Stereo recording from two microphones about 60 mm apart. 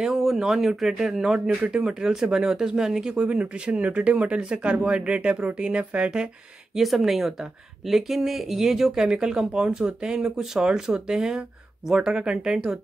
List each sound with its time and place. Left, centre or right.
0.0 s speech: centre
6.7 s speech: centre